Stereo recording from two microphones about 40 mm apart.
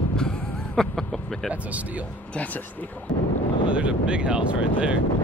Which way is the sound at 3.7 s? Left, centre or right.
Right.